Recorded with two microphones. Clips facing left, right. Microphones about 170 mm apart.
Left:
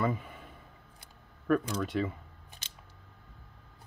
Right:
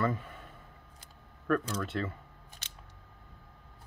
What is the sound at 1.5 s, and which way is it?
Speech, 10° left (ahead or behind).